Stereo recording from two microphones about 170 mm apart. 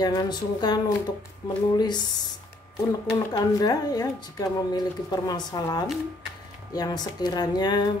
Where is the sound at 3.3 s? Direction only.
20° left (ahead or behind).